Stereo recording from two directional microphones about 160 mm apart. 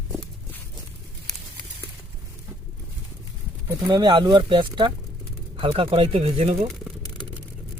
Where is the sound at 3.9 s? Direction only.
30° right (ahead or behind).